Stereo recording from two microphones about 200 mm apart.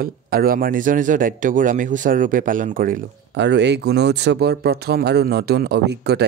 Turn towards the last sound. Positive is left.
turn(degrees=-55)  # may be behind; listen again after turning